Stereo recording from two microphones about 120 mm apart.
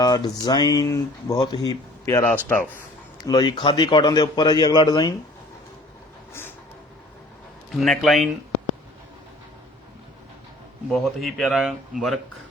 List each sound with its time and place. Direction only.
0.0 s speech: 35° left (ahead or behind)
2.1 s speech: 15° left (ahead or behind)
3.2 s speech: 35° left (ahead or behind)
7.8 s speech: centre (ahead or behind)
10.9 s speech: centre (ahead or behind)